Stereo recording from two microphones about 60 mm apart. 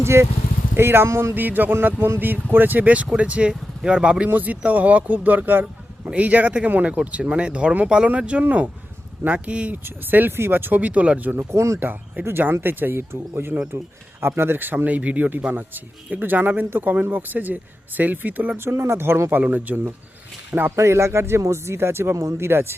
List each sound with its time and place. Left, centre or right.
0.0 s speech: right; by 4.3 s centre
4.3 s speech: right
9.8 s speech: right
11.5 s speech: right
11.8 s speech: right
18.5 s speech: right
20.7 s speech: right